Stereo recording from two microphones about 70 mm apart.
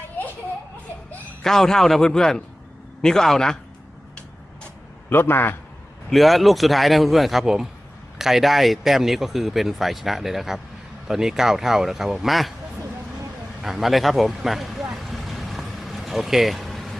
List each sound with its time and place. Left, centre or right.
1.4 s speech: centre
5.0 s a man's voice: left
6.1 s speech: centre
13.6 s speech: centre
14.9 s vehicle: centre